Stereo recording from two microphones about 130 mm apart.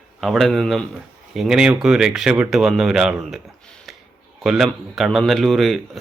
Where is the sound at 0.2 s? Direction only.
Centre (ahead or behind).